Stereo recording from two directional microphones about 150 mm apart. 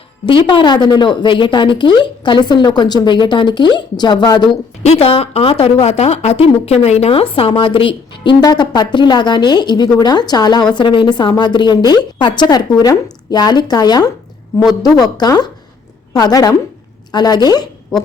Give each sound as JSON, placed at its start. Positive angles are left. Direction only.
{"t": 0.3, "sound": "a woman's voice", "side_deg": 30}
{"t": 4.8, "sound": "a woman's voice", "side_deg": 45}